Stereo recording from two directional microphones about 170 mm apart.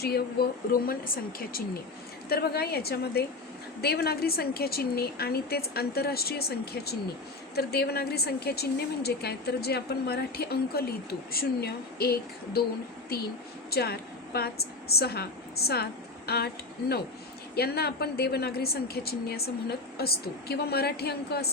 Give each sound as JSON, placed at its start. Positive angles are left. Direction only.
{"t": 0.0, "sound": "a woman's voice", "side_deg": 70}
{"t": 13.7, "sound": "a woman's voice", "side_deg": 65}
{"t": 17.5, "sound": "a woman's voice", "side_deg": 65}